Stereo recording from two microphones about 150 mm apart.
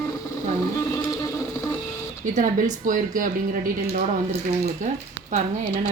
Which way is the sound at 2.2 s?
60° right (ahead or behind).